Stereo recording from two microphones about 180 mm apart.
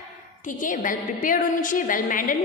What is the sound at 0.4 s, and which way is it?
A woman's voice, 45° left (ahead or behind).